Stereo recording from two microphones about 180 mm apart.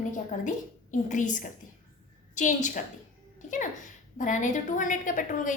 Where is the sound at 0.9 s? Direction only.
45° left (ahead or behind).